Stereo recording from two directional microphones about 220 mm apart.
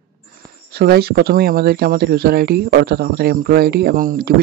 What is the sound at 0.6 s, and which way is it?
Speech, 45° right (ahead or behind).